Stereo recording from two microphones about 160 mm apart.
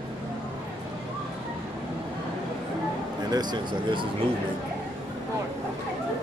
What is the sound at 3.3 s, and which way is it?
Speech, 25° right (ahead or behind).